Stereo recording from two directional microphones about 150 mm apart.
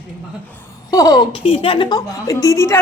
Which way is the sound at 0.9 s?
25° left (ahead or behind).